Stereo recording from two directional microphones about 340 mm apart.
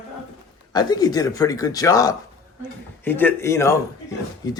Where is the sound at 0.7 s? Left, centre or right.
Centre.